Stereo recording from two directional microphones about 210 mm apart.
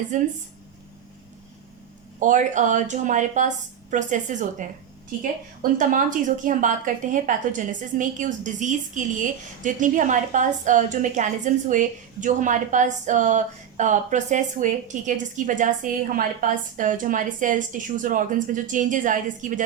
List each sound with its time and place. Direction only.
0.1 s a woman's voice: 35° right (ahead or behind)
2.1 s a woman's voice: 35° right (ahead or behind)